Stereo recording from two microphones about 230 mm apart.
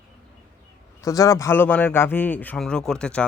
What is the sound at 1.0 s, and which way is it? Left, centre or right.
A man's voice, centre.